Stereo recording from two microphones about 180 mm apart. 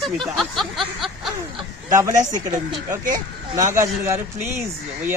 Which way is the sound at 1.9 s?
20° right (ahead or behind).